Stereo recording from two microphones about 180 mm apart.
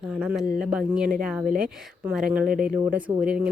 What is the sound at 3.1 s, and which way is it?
Speech, 20° right (ahead or behind).